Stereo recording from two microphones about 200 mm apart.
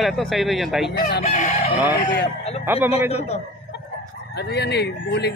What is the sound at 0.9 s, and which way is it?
Chicken, 50° left (ahead or behind).